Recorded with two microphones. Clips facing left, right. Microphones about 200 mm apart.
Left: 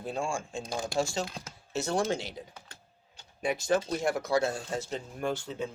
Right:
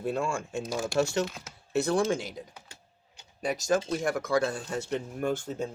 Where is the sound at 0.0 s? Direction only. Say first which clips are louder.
Right 3 dB; 65° right (ahead or behind).